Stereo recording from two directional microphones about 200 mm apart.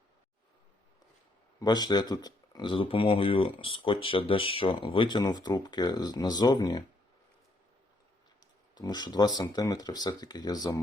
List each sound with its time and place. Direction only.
1.5 s speech: 20° left (ahead or behind)
8.7 s speech: 20° left (ahead or behind)